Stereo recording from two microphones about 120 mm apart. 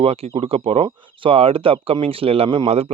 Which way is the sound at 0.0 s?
55° right (ahead or behind).